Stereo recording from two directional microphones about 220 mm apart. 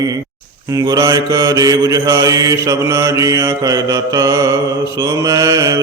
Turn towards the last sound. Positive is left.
turn(degrees=-15)  # may be behind; listen again after turning